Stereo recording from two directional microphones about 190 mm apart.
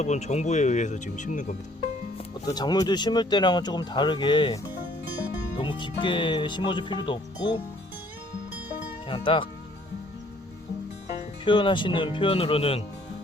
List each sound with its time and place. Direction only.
0.0 s speech: 35° left (ahead or behind)
2.5 s speech: 20° left (ahead or behind)
9.0 s speech: 30° left (ahead or behind)
11.4 s speech: 25° left (ahead or behind)